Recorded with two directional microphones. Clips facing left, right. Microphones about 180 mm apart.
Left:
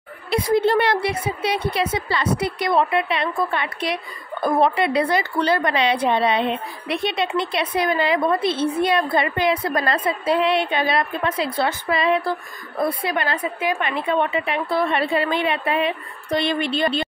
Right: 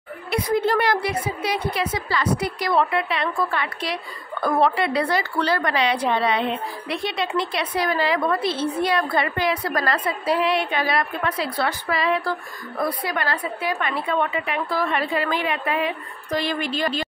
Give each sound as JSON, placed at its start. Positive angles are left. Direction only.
{"t": 0.3, "sound": "a woman's voice", "side_deg": 25}